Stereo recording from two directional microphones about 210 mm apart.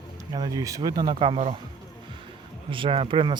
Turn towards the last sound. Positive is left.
turn(degrees=-25)  # may be behind; listen again after turning